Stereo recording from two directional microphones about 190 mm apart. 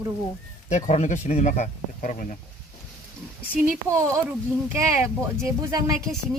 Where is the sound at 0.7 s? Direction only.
40° left (ahead or behind).